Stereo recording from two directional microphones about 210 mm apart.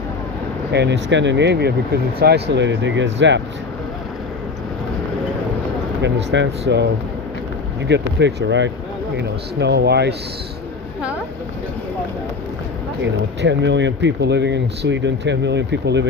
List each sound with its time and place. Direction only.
0.7 s speech: 55° right (ahead or behind)
6.0 s speech: 60° right (ahead or behind)
7.9 s speech: 55° right (ahead or behind)
13.4 s speech: 55° right (ahead or behind)